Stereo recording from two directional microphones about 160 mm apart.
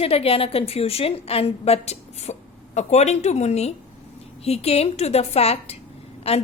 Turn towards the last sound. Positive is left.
turn(degrees=40)  # may be behind; listen again after turning